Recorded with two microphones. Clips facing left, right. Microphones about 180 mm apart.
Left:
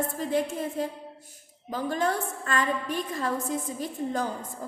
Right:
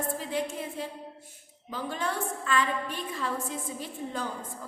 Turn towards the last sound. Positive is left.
turn(degrees=45)  # may be behind; listen again after turning